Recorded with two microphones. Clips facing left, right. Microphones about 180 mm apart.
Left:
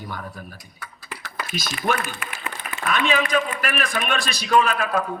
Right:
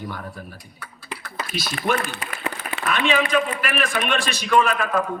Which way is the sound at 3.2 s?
40° left (ahead or behind).